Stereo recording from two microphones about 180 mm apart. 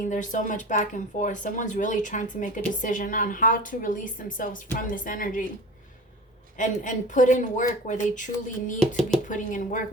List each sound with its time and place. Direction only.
0.0 s speech: 45° left (ahead or behind)
6.6 s speech: 45° left (ahead or behind)
9.0 s speech: centre (ahead or behind)
9.3 s speech: 45° left (ahead or behind)